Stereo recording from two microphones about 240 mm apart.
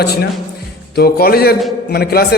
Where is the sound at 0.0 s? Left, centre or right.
Left.